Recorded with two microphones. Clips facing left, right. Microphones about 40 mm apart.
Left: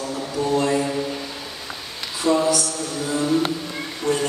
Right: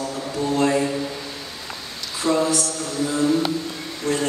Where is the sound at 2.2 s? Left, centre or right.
Left.